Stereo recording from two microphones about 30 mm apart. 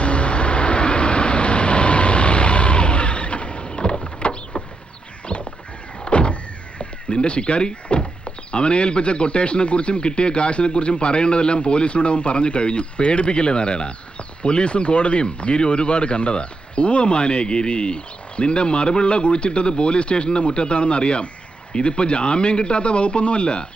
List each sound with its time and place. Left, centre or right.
0.0 s vehicle: left
5.2 s a sound: left
6.1 s power windows: left
7.2 s speech: left